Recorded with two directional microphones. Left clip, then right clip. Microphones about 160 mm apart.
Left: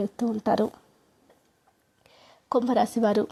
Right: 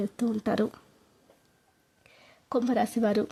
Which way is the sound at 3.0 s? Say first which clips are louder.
Left 3 dB; 30° right (ahead or behind).